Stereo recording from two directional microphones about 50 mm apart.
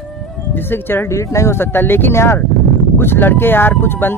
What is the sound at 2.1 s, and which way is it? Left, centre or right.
Speech, left.